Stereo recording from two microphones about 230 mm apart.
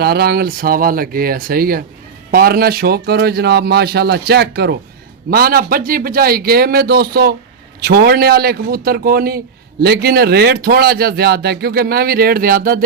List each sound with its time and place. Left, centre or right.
0.0 s a man's voice: right